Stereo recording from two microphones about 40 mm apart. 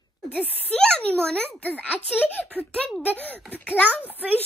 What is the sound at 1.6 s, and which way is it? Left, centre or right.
Speech, left.